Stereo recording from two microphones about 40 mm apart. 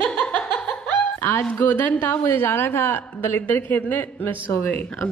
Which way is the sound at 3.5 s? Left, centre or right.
Left.